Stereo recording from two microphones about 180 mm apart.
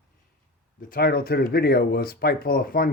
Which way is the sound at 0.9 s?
60° left (ahead or behind).